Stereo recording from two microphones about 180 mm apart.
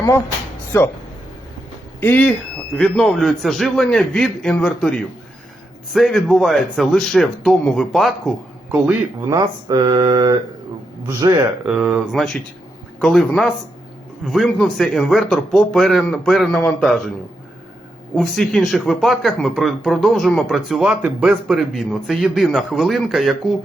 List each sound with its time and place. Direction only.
2.0 s speech: 10° left (ahead or behind)
8.7 s speech: 10° right (ahead or behind)
9.4 s mantra: 25° right (ahead or behind)
11.6 s speech: 5° right (ahead or behind)
18.1 s speech: centre (ahead or behind)